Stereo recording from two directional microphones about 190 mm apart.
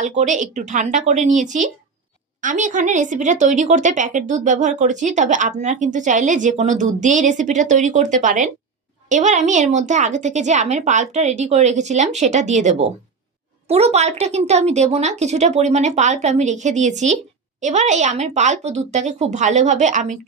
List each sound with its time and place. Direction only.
0.1 s a woman's voice: 40° right (ahead or behind)